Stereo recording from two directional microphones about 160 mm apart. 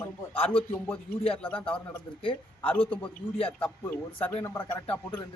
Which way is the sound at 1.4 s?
10° left (ahead or behind).